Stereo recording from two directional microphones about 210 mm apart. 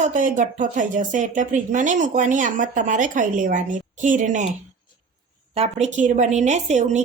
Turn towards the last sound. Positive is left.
turn(degrees=-35)  # may be behind; listen again after turning